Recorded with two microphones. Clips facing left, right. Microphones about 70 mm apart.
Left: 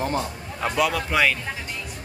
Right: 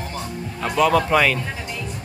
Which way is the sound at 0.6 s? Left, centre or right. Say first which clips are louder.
Right 5 dB; centre.